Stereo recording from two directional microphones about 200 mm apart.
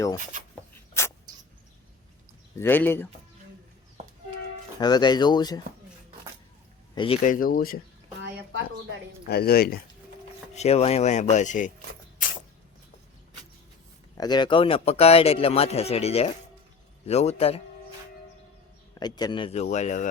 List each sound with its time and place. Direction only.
2.6 s speech: 10° left (ahead or behind)
4.8 s speech: 20° left (ahead or behind)
6.9 s speech: 25° left (ahead or behind)
7.2 s speech: 45° left (ahead or behind)
9.3 s speech: 50° left (ahead or behind)
10.5 s speech: 30° left (ahead or behind)
14.2 s speech: 20° left (ahead or behind)
18.9 s speech: 20° left (ahead or behind); by 20.1 s 35° left (ahead or behind)